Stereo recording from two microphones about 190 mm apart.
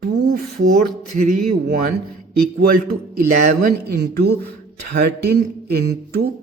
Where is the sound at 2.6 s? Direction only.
50° right (ahead or behind).